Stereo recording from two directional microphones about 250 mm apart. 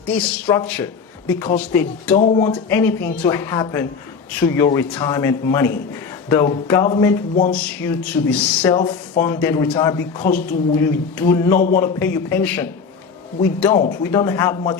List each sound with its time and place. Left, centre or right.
0.0 s speech: centre
2.1 s speech: left
2.5 s speech: centre